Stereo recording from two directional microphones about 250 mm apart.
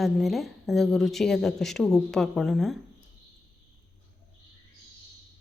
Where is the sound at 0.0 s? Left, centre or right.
Centre.